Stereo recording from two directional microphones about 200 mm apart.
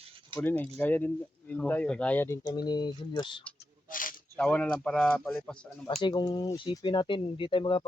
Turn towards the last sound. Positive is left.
turn(degrees=25)  # may be behind; listen again after turning